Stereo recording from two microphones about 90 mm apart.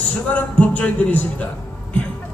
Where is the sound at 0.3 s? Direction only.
15° left (ahead or behind).